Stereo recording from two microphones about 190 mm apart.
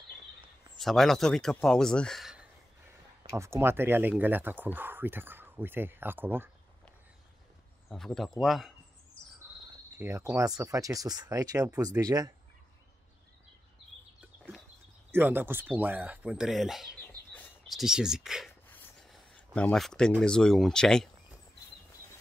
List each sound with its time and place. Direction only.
0.7 s speech: centre (ahead or behind)
3.3 s speech: 15° right (ahead or behind)
7.9 s speech: centre (ahead or behind)
9.9 s speech: 10° right (ahead or behind)
15.0 s speech: 10° right (ahead or behind)
18.7 s a sound: 5° left (ahead or behind)
20.2 s speech: 5° left (ahead or behind)